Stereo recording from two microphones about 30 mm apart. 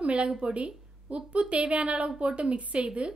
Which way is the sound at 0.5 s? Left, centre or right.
Right.